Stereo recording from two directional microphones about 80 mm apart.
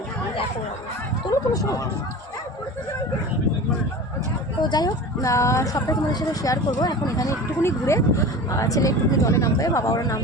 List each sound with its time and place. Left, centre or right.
1.3 s speech: left
4.6 s speech: left
5.2 s speech: left
7.6 s speech: left